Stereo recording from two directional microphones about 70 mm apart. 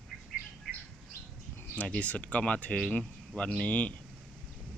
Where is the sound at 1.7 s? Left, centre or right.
Centre.